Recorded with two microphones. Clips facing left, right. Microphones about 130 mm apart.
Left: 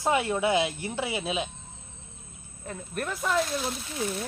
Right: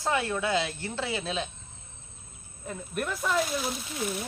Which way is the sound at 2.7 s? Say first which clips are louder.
Right 1 dB; centre (ahead or behind).